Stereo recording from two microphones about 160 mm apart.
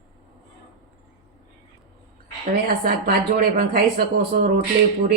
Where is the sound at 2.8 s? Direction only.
65° right (ahead or behind).